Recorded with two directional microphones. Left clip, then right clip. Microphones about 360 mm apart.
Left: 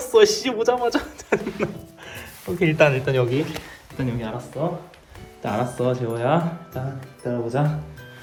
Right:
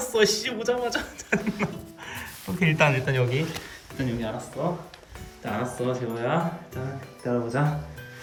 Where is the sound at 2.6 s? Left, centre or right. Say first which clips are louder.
Left 4 dB; centre.